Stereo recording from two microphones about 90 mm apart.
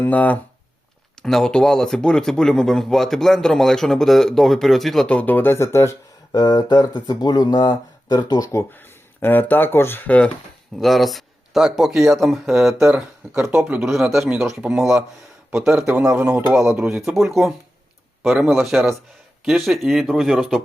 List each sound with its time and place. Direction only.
0.0 s speech: 15° left (ahead or behind)
1.2 s speech: 5° left (ahead or behind)
5.0 s speech: 15° left (ahead or behind); by 6.4 s 35° left (ahead or behind)
6.4 s speech: 50° left (ahead or behind)
9.2 s speech: 20° left (ahead or behind)
10.8 s speech: centre (ahead or behind)
13.8 s speech: centre (ahead or behind)